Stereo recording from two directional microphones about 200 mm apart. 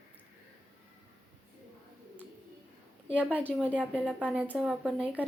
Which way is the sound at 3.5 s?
5° right (ahead or behind).